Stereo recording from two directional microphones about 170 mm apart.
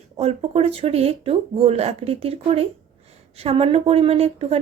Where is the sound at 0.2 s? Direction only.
35° right (ahead or behind).